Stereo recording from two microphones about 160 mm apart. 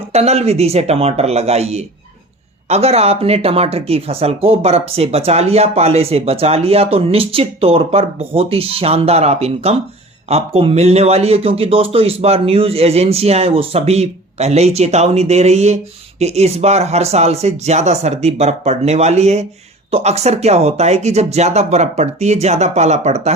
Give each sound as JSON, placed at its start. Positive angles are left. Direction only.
{"t": 0.1, "sound": "speech", "side_deg": -40}